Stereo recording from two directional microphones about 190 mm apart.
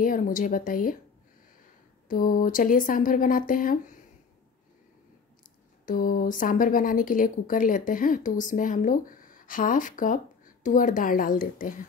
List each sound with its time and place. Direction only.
0.0 s a woman's voice: 45° left (ahead or behind)
2.0 s a woman's voice: 45° left (ahead or behind)
5.9 s a woman's voice: 50° left (ahead or behind)